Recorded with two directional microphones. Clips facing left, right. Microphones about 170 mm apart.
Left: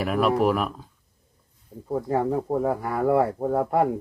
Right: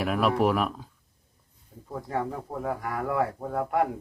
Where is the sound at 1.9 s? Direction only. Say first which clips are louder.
Left 7 dB; 30° left (ahead or behind).